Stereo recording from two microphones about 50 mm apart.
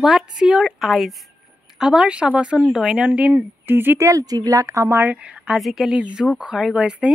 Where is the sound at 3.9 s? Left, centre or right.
Right.